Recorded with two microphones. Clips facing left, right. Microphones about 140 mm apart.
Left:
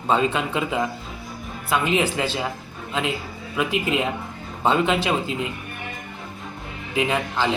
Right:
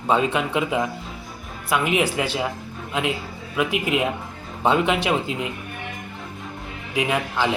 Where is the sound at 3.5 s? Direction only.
15° right (ahead or behind).